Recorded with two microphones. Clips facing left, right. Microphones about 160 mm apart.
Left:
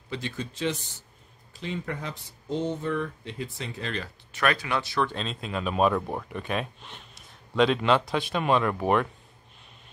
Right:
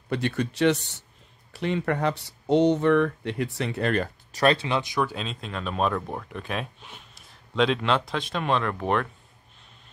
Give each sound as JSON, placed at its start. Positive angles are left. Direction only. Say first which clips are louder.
{"t": 0.1, "sound": "speech", "louder": "right 7 dB", "side_deg": -65}
{"t": 4.3, "sound": "speech", "louder": "right 4 dB", "side_deg": -30}